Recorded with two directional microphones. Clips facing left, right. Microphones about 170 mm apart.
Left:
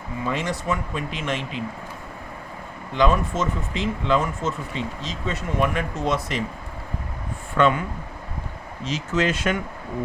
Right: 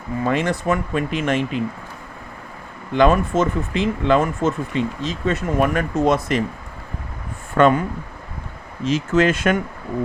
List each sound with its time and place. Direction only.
0.3 s speech: 55° right (ahead or behind)
2.9 s speech: 60° right (ahead or behind)
7.5 s speech: 50° right (ahead or behind)
8.8 s speech: 50° right (ahead or behind)